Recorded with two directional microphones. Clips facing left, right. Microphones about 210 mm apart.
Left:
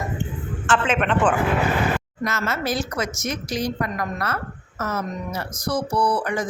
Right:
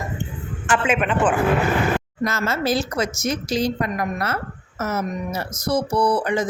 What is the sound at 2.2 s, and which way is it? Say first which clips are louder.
Speech: right 3 dB; 30° right (ahead or behind).